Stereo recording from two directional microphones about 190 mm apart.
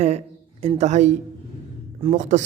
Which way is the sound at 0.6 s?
35° right (ahead or behind).